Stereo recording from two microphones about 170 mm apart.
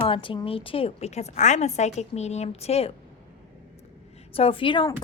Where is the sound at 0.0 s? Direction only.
30° left (ahead or behind).